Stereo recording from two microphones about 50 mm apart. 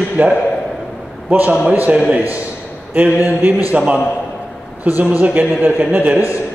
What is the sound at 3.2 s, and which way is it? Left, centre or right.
Speech, right.